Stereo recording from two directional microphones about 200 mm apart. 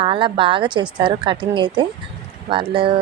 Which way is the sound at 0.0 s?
25° right (ahead or behind).